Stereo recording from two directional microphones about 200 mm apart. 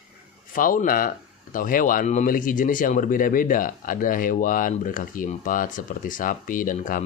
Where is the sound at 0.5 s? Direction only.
45° left (ahead or behind).